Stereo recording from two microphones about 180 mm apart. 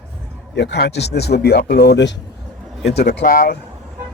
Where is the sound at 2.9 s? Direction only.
60° left (ahead or behind).